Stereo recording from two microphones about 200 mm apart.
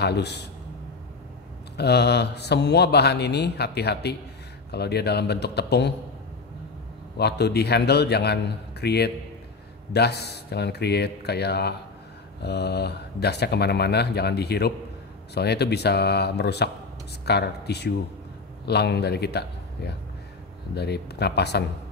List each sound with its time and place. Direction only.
0.0 s speech: 55° left (ahead or behind)
1.8 s speech: 55° left (ahead or behind)
7.2 s speech: 55° left (ahead or behind)